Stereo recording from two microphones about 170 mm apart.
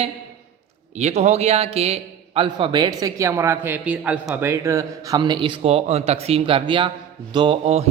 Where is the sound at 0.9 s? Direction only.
40° right (ahead or behind).